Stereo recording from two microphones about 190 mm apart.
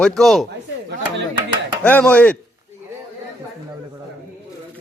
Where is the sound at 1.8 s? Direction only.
5° left (ahead or behind).